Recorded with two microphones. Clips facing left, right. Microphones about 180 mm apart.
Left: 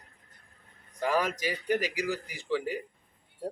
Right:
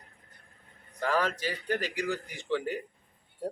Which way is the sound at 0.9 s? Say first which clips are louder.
Left 1 dB; 10° left (ahead or behind).